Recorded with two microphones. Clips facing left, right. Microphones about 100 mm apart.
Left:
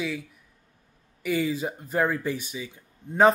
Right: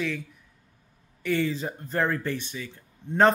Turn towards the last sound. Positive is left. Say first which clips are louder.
# left 1 dB
turn(degrees=5)  # may be behind; listen again after turning